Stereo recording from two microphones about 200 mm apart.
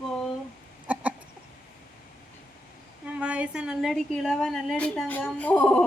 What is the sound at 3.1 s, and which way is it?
A woman's voice, 5° right (ahead or behind).